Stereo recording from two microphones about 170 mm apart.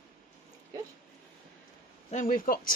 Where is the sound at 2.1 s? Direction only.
55° left (ahead or behind).